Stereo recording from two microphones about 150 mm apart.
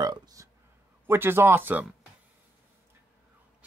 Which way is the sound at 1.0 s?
15° right (ahead or behind).